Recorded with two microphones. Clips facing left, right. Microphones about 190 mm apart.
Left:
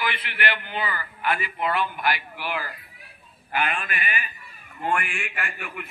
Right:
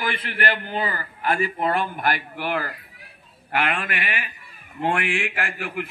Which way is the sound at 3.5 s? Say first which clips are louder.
Right 3 dB; 70° right (ahead or behind).